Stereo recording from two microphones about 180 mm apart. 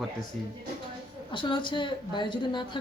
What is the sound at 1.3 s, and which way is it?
A woman's voice, 25° left (ahead or behind).